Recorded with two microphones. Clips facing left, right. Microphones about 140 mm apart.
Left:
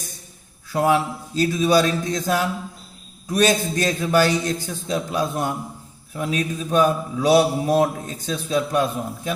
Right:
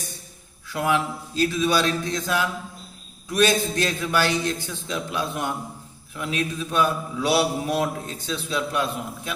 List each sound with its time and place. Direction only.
0.7 s a man's voice: 40° left (ahead or behind)